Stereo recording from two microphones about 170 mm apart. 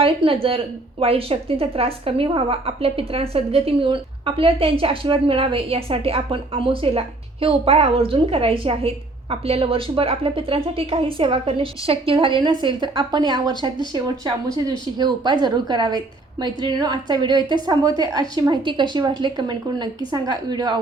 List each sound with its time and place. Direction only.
0.0 s a woman's voice: 30° right (ahead or behind)